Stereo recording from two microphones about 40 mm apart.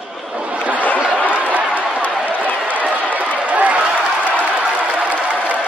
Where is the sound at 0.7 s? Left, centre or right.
Left.